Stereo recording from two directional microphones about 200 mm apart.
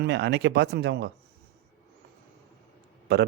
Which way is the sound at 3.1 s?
55° right (ahead or behind).